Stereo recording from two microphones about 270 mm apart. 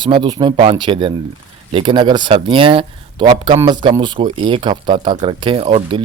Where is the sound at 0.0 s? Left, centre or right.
Centre.